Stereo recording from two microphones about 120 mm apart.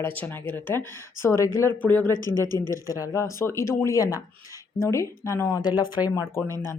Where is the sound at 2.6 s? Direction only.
25° left (ahead or behind).